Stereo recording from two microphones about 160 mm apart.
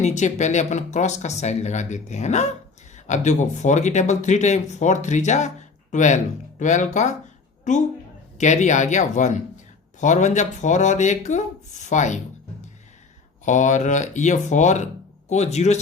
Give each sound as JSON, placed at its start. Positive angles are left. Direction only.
{"t": 0.0, "sound": "speech", "side_deg": 45}
{"t": 13.4, "sound": "speech", "side_deg": 50}